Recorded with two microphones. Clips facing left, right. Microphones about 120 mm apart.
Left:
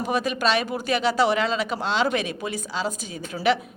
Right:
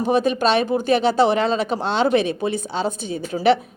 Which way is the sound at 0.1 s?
25° right (ahead or behind).